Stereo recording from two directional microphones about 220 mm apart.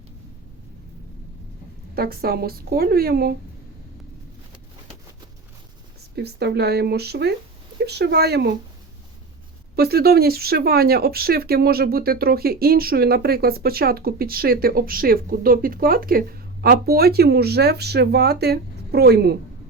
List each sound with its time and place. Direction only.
2.0 s speech: 45° right (ahead or behind)
6.1 s speech: 50° right (ahead or behind)
9.7 s speech: 45° right (ahead or behind)